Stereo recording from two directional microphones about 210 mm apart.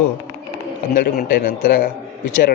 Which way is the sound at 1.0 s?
40° left (ahead or behind).